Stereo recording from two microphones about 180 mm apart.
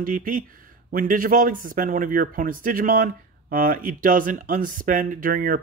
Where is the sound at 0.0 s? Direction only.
50° right (ahead or behind).